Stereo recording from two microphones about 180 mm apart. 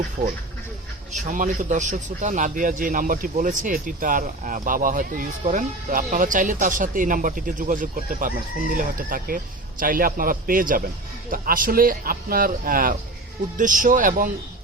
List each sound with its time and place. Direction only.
1.1 s a man's voice: 45° right (ahead or behind)